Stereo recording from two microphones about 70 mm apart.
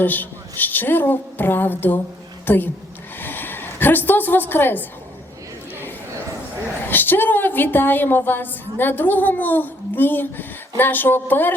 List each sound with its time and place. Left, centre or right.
0.0 s a woman's voice: left
3.2 s a sound: left
6.8 s a woman's voice: left